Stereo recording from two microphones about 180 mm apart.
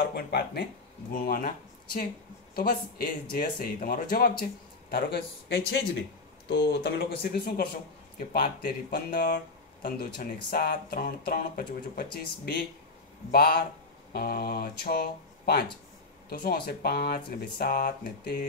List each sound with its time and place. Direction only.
0.1 s speech: 65° left (ahead or behind)
1.1 s speech: 50° left (ahead or behind)
2.5 s speech: 55° left (ahead or behind)